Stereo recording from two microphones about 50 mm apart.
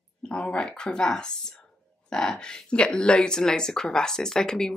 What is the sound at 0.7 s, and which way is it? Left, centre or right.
Speech, centre.